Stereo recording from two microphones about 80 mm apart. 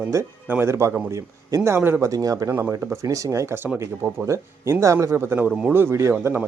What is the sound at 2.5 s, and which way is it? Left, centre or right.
A man's voice, right.